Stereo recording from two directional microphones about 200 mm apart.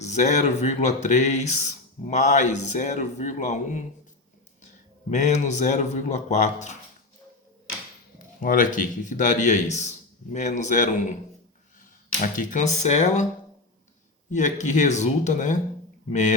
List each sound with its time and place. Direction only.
0.0 s speech: 35° left (ahead or behind)
5.1 s speech: 35° left (ahead or behind)
8.4 s speech: 40° left (ahead or behind)
12.2 s speech: 40° left (ahead or behind)
14.3 s speech: 35° left (ahead or behind)